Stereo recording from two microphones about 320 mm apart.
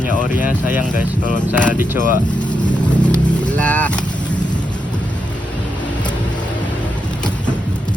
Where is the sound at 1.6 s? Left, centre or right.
Centre.